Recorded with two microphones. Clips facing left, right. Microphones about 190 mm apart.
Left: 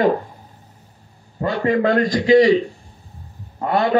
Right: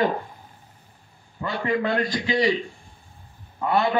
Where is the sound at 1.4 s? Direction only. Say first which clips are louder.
Left 7 dB; 45° left (ahead or behind).